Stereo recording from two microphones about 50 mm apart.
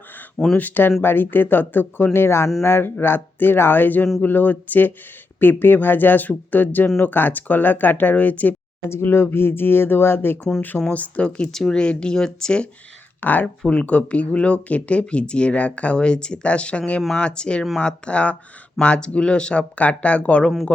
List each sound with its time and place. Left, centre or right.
0.5 s speech: left
2.1 s speech: left
8.9 s speech: left
10.9 s speech: left
11.4 s speech: centre
11.8 s speech: centre
13.2 s speech: left